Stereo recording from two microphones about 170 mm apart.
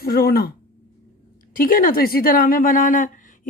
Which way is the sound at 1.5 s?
55° left (ahead or behind).